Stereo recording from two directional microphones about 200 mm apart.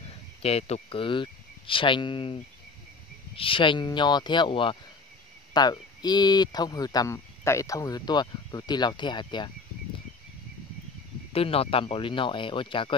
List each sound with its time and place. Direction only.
0.1 s speech: 30° left (ahead or behind)
11.3 s speech: 30° left (ahead or behind)